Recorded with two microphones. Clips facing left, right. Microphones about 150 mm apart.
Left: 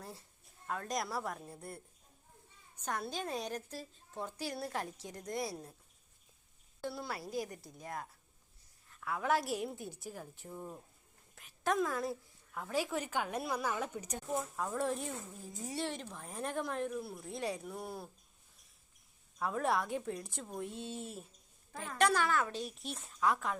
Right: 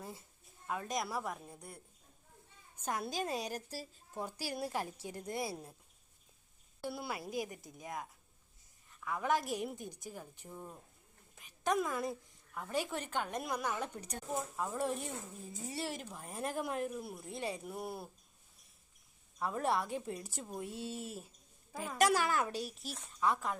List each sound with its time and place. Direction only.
0.0 s a sound: centre (ahead or behind)
0.7 s speech: 5° right (ahead or behind)
2.8 s a woman's voice: 5° right (ahead or behind)
6.8 s a woman's voice: 10° right (ahead or behind)
7.3 s a woman's voice: 5° right (ahead or behind)
14.3 s speech: 5° right (ahead or behind)
17.2 s speech: centre (ahead or behind)
19.4 s a woman's voice: centre (ahead or behind)
22.6 s speech: centre (ahead or behind)